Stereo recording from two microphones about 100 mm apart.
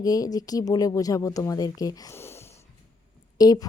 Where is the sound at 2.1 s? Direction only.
25° left (ahead or behind).